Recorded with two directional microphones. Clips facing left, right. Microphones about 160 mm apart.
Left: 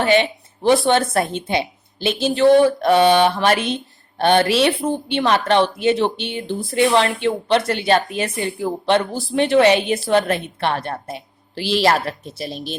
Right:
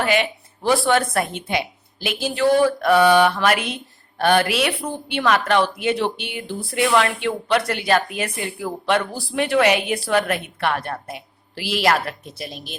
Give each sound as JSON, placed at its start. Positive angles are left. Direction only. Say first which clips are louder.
{"t": 0.0, "sound": "speech", "louder": "left 4 dB", "side_deg": 30}